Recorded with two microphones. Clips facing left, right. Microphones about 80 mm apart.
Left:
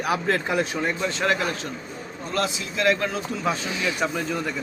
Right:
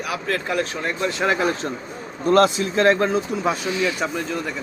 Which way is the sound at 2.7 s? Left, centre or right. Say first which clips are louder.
Right 4 dB; right.